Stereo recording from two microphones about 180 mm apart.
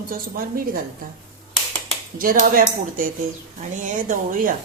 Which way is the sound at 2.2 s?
55° right (ahead or behind).